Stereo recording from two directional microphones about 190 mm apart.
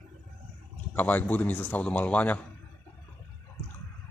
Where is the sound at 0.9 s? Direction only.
10° left (ahead or behind).